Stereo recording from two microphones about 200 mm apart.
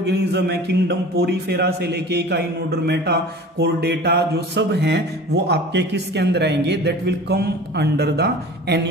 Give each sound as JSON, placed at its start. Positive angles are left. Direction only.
{"t": 0.0, "sound": "a man's voice", "side_deg": -55}